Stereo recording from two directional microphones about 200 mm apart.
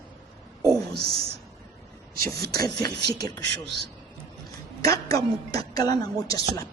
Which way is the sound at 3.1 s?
20° left (ahead or behind).